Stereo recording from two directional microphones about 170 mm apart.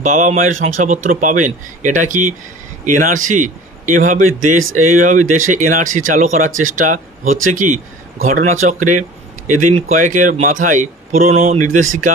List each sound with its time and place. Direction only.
0.0 s a man's voice: 50° right (ahead or behind)